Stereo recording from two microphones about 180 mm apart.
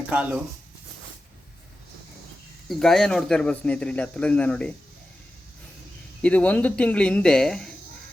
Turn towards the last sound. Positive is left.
turn(degrees=5)  # may be behind; listen again after turning